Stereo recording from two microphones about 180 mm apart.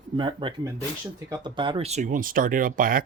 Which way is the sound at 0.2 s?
30° right (ahead or behind).